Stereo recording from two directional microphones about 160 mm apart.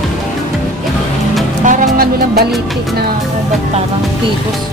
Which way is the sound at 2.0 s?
75° right (ahead or behind).